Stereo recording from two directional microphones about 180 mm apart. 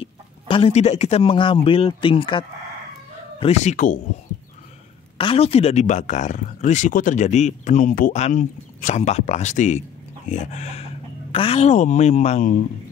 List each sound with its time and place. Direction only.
0.0 s speech: 30° left (ahead or behind)
5.1 s speech: 30° left (ahead or behind)